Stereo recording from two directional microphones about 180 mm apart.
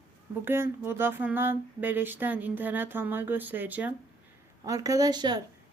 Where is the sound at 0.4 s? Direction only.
15° right (ahead or behind).